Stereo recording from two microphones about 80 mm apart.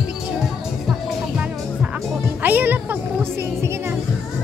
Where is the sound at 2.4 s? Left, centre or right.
Right.